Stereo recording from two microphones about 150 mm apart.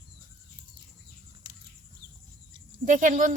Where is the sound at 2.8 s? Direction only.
60° right (ahead or behind).